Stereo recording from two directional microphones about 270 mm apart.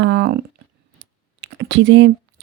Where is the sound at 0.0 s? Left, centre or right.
Right.